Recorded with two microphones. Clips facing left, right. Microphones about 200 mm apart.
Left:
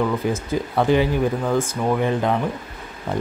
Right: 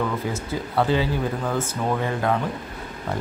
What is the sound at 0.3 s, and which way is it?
Speech, 15° left (ahead or behind).